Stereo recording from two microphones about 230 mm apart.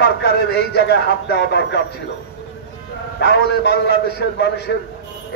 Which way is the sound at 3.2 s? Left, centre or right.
Left.